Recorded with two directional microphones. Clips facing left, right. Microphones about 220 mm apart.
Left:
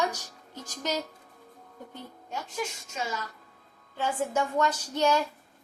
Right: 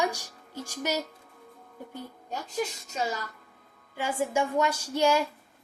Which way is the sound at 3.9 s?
10° right (ahead or behind).